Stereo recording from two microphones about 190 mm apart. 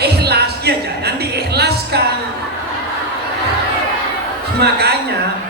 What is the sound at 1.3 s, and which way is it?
Music, 60° right (ahead or behind).